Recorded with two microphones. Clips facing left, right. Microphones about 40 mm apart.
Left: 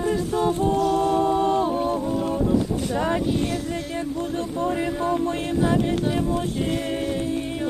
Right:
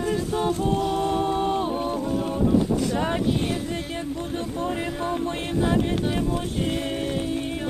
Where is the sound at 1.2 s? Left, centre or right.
Right.